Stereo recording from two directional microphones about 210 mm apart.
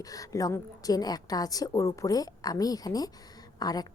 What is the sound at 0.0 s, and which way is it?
A woman's voice, 15° left (ahead or behind).